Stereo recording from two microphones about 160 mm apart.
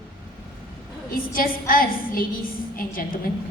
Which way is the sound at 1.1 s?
60° left (ahead or behind).